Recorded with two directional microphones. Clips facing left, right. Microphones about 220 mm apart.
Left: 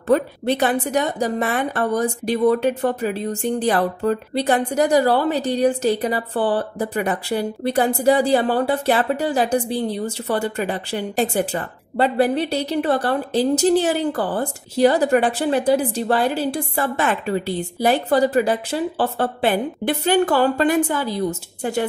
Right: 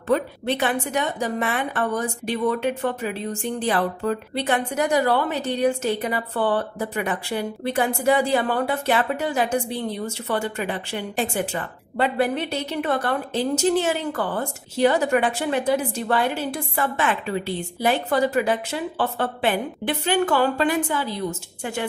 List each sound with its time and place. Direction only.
0.1 s a woman's voice: 40° left (ahead or behind)